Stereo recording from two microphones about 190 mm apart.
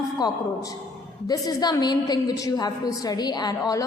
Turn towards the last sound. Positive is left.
turn(degrees=20)  # may be behind; listen again after turning